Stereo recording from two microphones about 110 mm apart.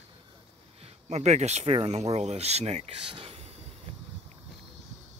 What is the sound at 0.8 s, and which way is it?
Speech, 90° right.